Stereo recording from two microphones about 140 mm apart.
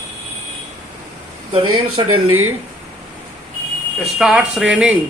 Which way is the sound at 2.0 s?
35° right (ahead or behind).